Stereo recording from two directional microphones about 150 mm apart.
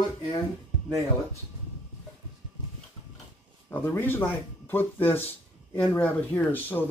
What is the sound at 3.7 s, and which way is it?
Speech, 15° left (ahead or behind).